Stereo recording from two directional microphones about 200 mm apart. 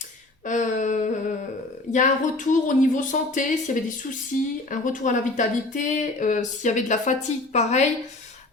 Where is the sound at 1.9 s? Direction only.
40° left (ahead or behind).